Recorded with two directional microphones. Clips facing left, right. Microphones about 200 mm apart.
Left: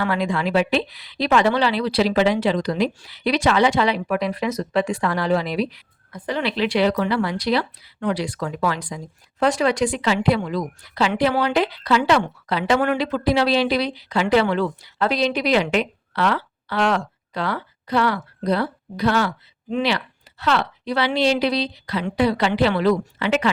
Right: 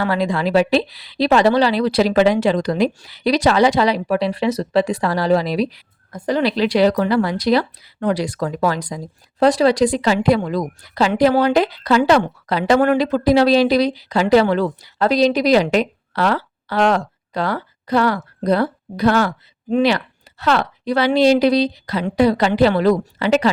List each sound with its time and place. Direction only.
0.0 s a woman's voice: 35° right (ahead or behind)